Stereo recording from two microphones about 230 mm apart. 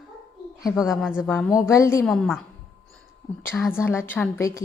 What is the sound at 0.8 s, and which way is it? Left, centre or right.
Speech, centre.